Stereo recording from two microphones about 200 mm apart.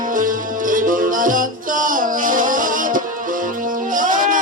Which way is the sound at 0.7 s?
40° right (ahead or behind).